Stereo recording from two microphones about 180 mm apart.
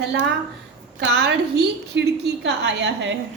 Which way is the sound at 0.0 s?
70° right (ahead or behind).